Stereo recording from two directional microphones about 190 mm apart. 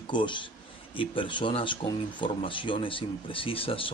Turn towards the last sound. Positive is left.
turn(degrees=30)  # may be behind; listen again after turning